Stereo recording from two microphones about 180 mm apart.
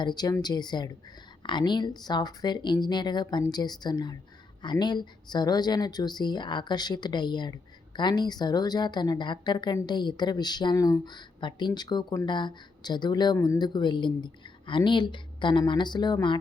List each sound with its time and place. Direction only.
0.0 s a woman's voice: 25° left (ahead or behind)